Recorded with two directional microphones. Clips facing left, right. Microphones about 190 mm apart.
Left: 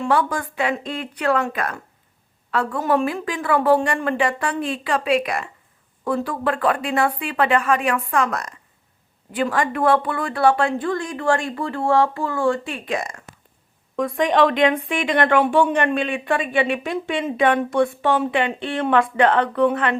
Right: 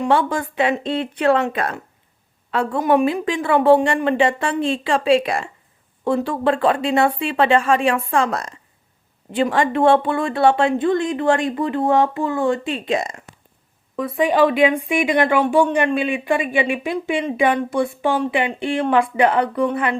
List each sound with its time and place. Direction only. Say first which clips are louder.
0.0 s speech: right 2 dB; 25° right (ahead or behind)
13.9 s speech: right 1 dB; 5° right (ahead or behind)